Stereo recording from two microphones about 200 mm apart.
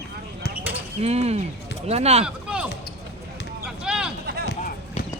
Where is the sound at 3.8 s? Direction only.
5° right (ahead or behind).